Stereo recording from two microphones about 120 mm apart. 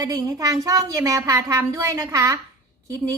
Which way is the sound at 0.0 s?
30° right (ahead or behind).